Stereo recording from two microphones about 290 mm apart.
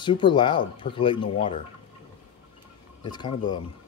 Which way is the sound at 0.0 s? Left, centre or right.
Centre.